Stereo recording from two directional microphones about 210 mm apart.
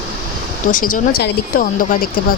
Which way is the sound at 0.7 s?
40° left (ahead or behind).